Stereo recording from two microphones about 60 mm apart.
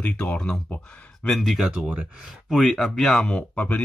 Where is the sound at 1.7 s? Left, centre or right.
Centre.